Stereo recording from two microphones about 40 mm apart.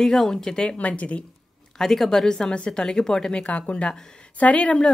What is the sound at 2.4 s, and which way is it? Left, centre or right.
Speech, left.